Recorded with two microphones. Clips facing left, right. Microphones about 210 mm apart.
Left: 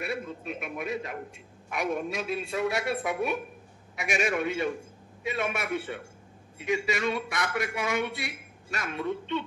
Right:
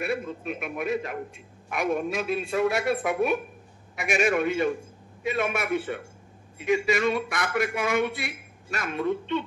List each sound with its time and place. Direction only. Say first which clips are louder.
0.0 s a man's voice: right 4 dB; 55° right (ahead or behind)